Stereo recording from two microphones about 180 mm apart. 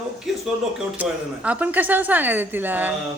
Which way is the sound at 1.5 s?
10° right (ahead or behind).